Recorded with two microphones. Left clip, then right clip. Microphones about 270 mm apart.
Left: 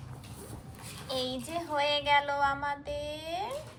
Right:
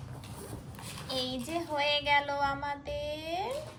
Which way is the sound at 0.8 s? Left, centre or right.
Centre.